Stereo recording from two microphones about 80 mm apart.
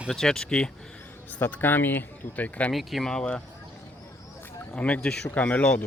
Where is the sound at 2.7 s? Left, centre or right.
Centre.